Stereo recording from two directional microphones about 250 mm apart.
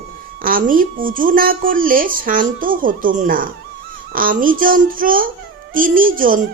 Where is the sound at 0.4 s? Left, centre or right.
Right.